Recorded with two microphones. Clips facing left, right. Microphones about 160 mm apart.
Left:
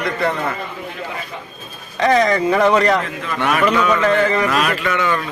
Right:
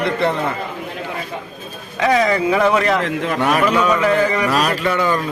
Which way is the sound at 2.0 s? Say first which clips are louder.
Left 1 dB; 5° right (ahead or behind).